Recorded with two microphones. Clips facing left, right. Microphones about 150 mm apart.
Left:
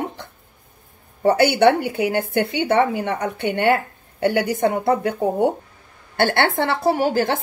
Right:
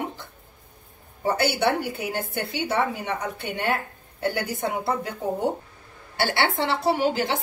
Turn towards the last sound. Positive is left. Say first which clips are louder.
# left 4 dB
turn(degrees=50)  # may be behind; listen again after turning